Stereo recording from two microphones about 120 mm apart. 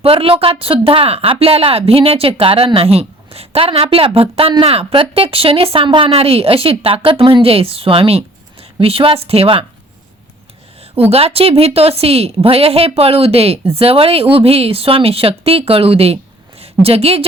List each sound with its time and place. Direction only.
0.0 s speech: 50° right (ahead or behind)
11.1 s a woman's voice: 55° right (ahead or behind)